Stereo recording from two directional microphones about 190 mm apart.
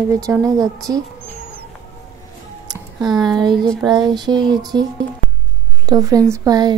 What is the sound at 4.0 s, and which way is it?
Speech, 20° right (ahead or behind).